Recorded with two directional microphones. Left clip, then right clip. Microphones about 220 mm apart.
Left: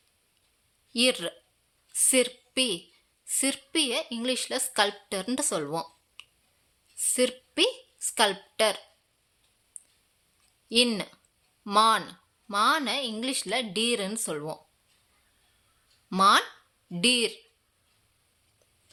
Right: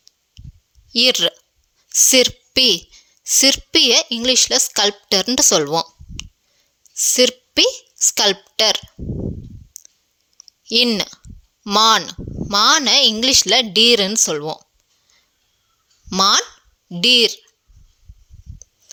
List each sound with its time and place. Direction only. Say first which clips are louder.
0.9 s a woman's voice: right 11 dB; 35° right (ahead or behind)
9.7 s clicking: right 12 dB; 35° right (ahead or behind)
10.7 s speech: right 9 dB; 35° right (ahead or behind)
16.0 s speech: right 5 dB; 35° right (ahead or behind)